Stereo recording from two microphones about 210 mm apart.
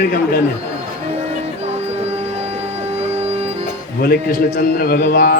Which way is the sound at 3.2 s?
30° right (ahead or behind).